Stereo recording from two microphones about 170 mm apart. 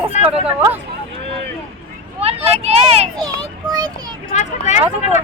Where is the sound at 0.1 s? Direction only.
40° left (ahead or behind).